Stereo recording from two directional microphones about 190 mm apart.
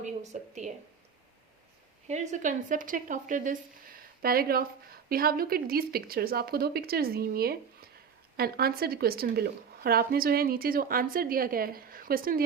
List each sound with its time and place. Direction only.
0.0 s a woman's voice: 40° right (ahead or behind)
2.0 s a woman's voice: 40° right (ahead or behind)